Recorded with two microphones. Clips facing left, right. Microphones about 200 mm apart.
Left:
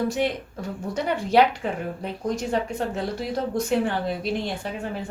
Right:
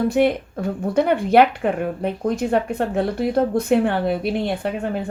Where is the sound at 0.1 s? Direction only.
55° right (ahead or behind).